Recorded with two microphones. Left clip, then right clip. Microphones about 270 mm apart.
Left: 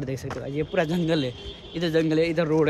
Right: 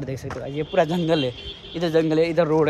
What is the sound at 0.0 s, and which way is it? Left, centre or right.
Speech, centre.